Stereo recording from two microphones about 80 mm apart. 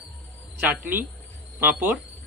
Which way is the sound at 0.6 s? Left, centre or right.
Right.